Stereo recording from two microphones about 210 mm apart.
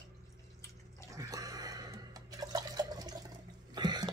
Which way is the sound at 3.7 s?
20° right (ahead or behind).